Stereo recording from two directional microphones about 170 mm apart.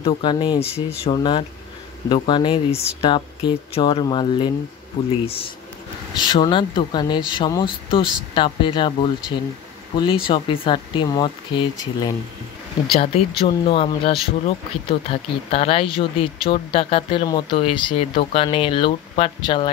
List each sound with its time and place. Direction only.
0.0 s speech: 25° left (ahead or behind)
6.1 s speech: 25° left (ahead or behind)